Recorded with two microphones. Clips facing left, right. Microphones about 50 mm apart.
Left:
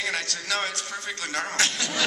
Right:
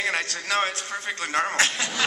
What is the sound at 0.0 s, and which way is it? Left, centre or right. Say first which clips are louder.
A man's voice: right 3 dB; right.